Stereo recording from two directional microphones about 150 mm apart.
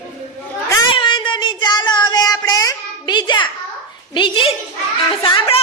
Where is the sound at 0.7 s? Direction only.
30° left (ahead or behind).